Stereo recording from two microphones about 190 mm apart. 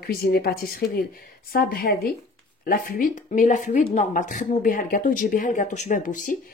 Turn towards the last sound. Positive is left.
turn(degrees=45)  # may be behind; listen again after turning